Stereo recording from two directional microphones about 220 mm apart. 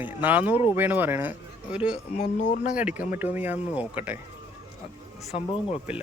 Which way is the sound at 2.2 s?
35° left (ahead or behind).